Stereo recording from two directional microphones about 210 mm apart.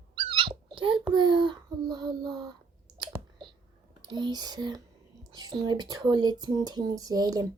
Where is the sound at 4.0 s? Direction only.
20° right (ahead or behind).